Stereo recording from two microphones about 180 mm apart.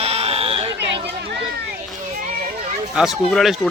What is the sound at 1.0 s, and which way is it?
Children playing, 65° right (ahead or behind).